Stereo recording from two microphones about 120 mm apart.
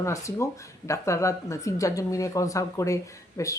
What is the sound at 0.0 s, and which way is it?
A woman's voice, 25° left (ahead or behind).